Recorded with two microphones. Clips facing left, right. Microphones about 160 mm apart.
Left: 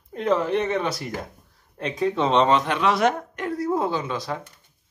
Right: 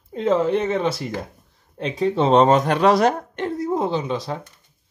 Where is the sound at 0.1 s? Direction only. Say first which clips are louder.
Right 3 dB; 25° right (ahead or behind).